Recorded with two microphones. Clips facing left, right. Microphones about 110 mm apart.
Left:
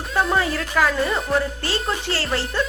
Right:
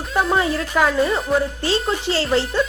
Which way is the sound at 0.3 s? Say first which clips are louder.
Right 2 dB; 20° right (ahead or behind).